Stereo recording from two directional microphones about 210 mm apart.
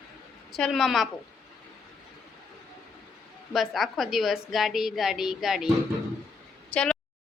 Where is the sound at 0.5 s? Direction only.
Centre (ahead or behind).